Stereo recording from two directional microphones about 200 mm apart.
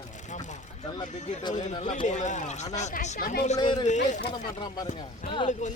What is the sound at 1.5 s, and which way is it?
Speech, 35° left (ahead or behind).